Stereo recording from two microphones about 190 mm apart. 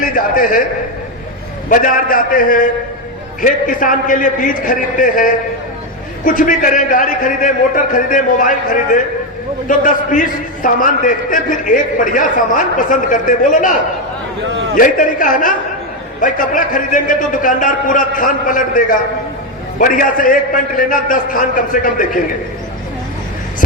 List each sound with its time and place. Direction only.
0.0 s a man's voice: 45° left (ahead or behind)
1.7 s a man's voice: 45° left (ahead or behind)
14.8 s a man's voice: 45° left (ahead or behind)